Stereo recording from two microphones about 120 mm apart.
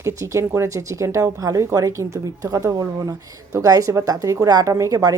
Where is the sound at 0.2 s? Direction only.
25° right (ahead or behind).